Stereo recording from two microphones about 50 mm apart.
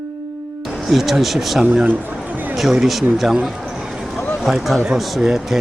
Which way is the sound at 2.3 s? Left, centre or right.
Right.